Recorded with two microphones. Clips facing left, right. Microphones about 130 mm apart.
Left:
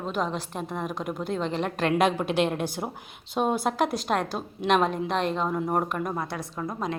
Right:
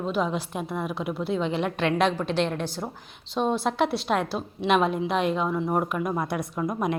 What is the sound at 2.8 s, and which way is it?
Speech, 15° left (ahead or behind).